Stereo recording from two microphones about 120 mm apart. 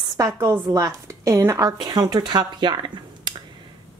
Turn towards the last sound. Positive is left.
turn(degrees=-40)  # may be behind; listen again after turning